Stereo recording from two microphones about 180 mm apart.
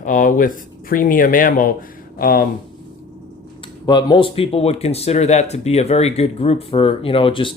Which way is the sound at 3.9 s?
25° left (ahead or behind).